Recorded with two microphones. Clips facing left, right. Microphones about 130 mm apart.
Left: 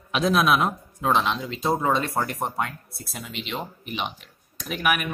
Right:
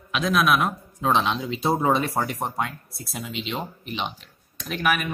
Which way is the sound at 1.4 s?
10° right (ahead or behind).